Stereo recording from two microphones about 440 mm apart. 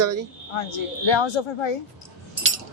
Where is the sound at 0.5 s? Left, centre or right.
Left.